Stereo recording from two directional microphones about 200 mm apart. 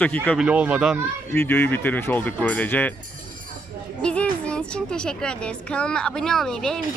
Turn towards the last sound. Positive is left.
turn(degrees=0)  # may be behind; listen again after turning